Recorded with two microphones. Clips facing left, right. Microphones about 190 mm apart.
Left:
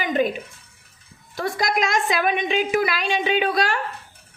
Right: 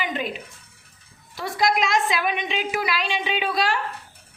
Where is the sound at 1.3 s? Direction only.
50° left (ahead or behind).